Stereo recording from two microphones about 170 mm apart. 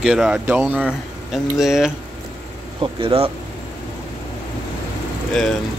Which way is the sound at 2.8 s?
35° right (ahead or behind).